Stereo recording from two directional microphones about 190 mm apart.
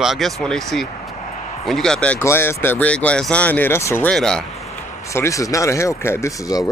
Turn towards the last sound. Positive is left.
turn(degrees=20)  # may be behind; listen again after turning